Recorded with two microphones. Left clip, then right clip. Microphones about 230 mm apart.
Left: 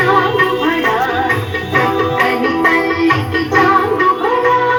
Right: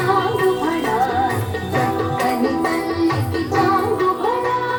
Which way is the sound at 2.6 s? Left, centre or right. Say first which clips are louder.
Left 7 dB; left.